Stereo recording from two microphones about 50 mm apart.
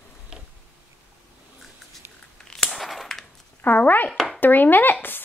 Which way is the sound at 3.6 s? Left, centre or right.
Left.